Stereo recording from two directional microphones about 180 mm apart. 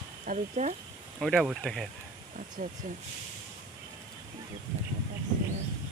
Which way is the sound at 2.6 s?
40° right (ahead or behind).